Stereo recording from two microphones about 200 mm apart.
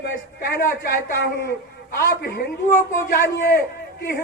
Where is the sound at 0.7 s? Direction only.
55° left (ahead or behind).